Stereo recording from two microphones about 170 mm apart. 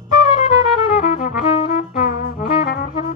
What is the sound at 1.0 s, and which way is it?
Brass instrument, 55° left (ahead or behind).